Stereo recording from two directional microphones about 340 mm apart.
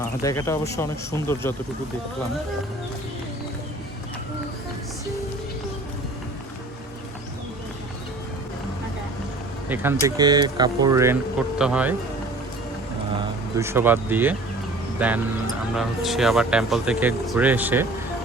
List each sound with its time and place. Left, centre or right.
0.2 s speech: centre
9.6 s speech: centre
13.6 s speech: centre